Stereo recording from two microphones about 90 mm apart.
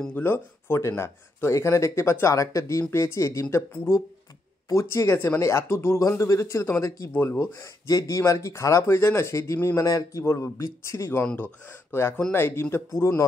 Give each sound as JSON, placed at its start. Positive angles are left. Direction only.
{"t": 0.2, "sound": "speech", "side_deg": 25}
{"t": 4.6, "sound": "speech", "side_deg": 35}